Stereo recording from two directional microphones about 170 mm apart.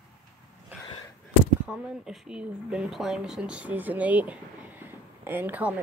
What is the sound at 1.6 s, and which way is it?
Speech, 5° right (ahead or behind).